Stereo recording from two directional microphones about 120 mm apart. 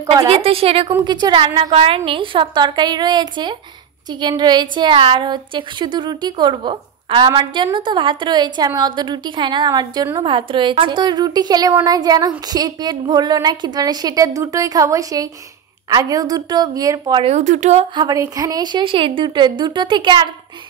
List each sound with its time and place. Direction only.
0.3 s a woman's voice: 50° right (ahead or behind)
1.0 s a woman's voice: 40° right (ahead or behind)
17.3 s speech: 90° right
17.9 s a woman's voice: 30° right (ahead or behind)